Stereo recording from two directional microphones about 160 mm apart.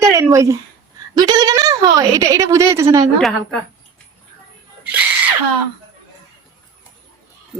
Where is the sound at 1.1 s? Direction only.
25° right (ahead or behind).